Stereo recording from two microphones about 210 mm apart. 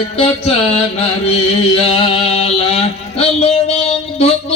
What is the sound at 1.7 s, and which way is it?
Music, 25° left (ahead or behind).